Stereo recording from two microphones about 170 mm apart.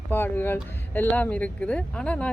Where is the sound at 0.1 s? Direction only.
10° left (ahead or behind).